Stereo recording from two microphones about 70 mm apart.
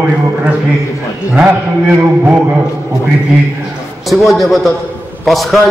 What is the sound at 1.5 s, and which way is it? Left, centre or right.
Speech, right.